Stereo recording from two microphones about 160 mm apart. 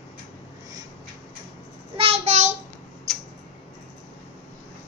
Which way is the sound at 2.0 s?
40° right (ahead or behind).